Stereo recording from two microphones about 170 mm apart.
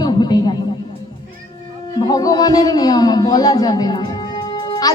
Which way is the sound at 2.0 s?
20° left (ahead or behind).